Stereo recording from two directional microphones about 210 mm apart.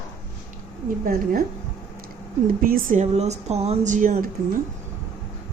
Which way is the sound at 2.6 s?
40° right (ahead or behind).